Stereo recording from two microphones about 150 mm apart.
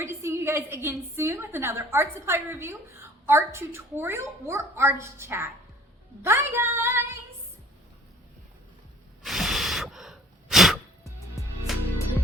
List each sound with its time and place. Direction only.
0.0 s a woman's voice: 20° right (ahead or behind)
9.2 s gasp: centre (ahead or behind)
11.7 s music: centre (ahead or behind)